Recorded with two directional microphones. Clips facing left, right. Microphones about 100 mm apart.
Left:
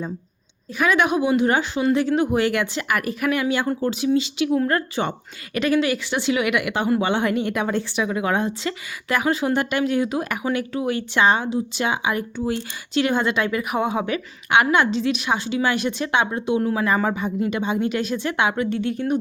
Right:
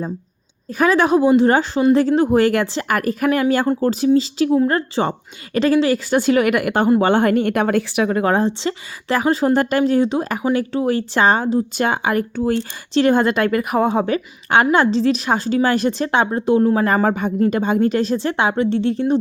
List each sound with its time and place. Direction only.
0.8 s a woman's voice: 35° right (ahead or behind)
12.9 s a woman's voice: 40° right (ahead or behind)